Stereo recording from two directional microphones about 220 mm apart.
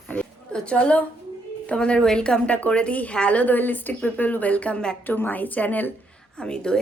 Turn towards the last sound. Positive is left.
turn(degrees=5)  # may be behind; listen again after turning